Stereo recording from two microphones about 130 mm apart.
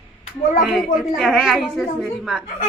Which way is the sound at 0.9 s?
Centre (ahead or behind).